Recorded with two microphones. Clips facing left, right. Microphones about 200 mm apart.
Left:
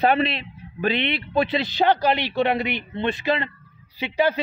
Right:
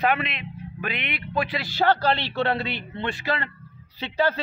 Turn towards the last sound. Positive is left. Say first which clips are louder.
# left 2 dB
turn(degrees=15)  # may be behind; listen again after turning